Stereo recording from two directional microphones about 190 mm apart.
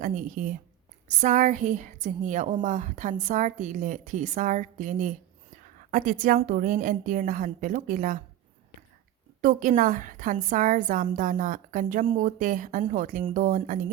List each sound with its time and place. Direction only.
0.0 s a woman's voice: 45° right (ahead or behind)
9.4 s a woman's voice: 45° right (ahead or behind)